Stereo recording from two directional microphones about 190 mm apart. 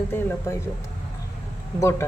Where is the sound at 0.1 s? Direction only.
10° left (ahead or behind).